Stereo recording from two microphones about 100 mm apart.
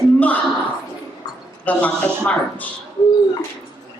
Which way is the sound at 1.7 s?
15° left (ahead or behind).